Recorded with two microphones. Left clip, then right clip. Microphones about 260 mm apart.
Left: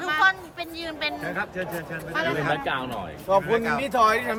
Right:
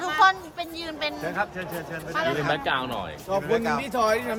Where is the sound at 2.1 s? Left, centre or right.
Centre.